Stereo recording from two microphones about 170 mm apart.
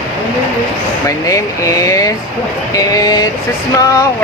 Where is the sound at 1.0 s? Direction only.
20° left (ahead or behind).